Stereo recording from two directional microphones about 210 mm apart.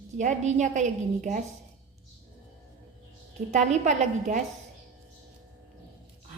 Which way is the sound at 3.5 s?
35° right (ahead or behind).